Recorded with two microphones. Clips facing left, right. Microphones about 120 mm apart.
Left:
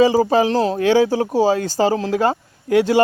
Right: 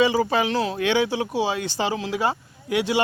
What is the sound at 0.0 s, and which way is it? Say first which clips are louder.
Speech: left 6 dB; 35° left (ahead or behind).